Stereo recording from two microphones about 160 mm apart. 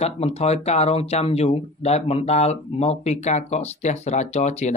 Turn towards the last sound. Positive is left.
turn(degrees=45)  # may be behind; listen again after turning